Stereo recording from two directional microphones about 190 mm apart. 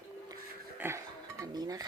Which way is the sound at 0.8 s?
10° right (ahead or behind).